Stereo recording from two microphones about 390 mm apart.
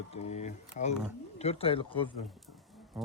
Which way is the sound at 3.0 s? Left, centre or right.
Centre.